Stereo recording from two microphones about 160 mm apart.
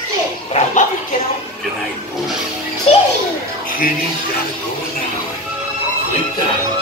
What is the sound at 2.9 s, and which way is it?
Music, 35° left (ahead or behind).